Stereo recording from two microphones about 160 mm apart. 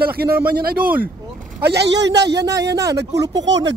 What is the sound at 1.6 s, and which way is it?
A man's voice, 90° right.